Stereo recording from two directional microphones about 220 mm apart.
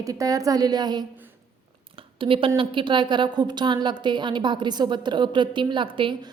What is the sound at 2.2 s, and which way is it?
A woman's voice, 25° right (ahead or behind).